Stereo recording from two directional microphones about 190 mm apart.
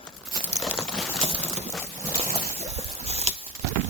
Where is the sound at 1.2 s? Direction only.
30° right (ahead or behind).